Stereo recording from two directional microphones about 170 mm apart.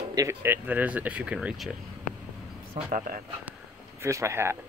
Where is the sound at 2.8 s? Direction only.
50° right (ahead or behind).